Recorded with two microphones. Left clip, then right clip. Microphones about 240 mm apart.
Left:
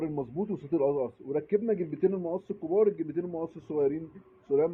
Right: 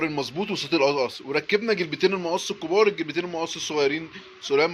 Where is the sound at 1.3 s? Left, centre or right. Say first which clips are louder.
Right 5 dB; centre.